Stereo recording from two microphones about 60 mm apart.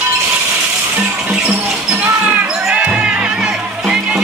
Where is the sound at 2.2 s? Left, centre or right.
Right.